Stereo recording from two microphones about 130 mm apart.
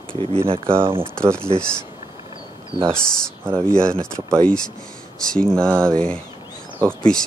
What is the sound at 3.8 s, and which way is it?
Speech, 5° left (ahead or behind).